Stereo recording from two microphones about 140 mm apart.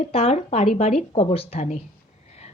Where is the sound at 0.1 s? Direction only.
50° left (ahead or behind).